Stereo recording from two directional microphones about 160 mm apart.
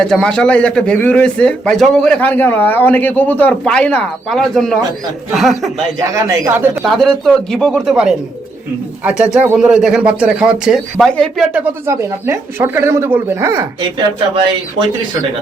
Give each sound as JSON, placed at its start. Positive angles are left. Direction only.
{"t": 0.0, "sound": "a man's voice", "side_deg": 5}
{"t": 6.0, "sound": "speech", "side_deg": -20}
{"t": 6.8, "sound": "speech", "side_deg": 0}